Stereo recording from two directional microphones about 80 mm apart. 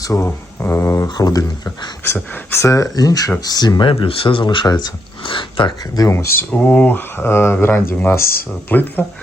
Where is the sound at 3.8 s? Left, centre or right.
Left.